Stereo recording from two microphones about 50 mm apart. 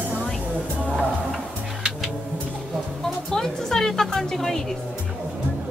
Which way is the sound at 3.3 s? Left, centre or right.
Centre.